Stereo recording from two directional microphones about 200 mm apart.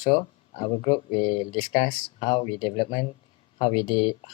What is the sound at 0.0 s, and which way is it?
Speech, 25° left (ahead or behind).